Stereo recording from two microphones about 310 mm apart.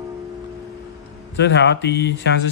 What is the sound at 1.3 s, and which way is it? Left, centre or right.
Speech, left.